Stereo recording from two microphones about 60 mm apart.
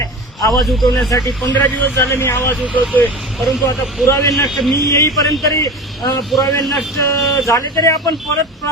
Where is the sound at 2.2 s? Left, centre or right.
Left.